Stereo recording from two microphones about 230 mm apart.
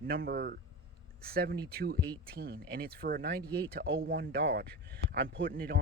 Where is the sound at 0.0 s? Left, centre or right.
Right.